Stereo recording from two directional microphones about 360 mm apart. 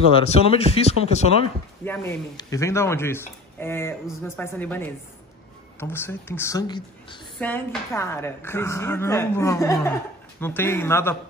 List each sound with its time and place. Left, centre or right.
0.2 s a woman's voice: centre